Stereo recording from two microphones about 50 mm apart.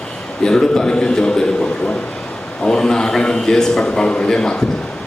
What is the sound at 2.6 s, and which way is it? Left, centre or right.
A man's voice, centre.